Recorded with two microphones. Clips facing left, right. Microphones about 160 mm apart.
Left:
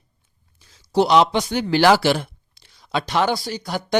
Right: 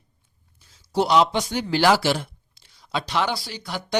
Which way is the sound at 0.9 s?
75° left (ahead or behind).